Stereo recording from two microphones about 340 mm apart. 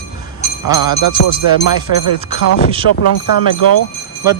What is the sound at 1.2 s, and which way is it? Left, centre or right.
Music, left.